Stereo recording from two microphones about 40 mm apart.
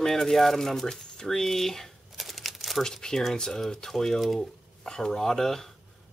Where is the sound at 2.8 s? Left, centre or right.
Centre.